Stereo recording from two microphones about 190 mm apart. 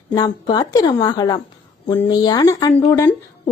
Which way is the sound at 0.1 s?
20° left (ahead or behind).